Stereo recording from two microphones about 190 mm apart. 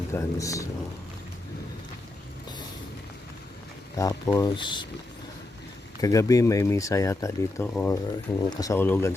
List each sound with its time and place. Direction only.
0.1 s speech: 15° left (ahead or behind)
3.9 s speech: 20° left (ahead or behind)
6.0 s speech: 20° left (ahead or behind)